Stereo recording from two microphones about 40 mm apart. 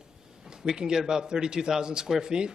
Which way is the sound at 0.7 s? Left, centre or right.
Centre.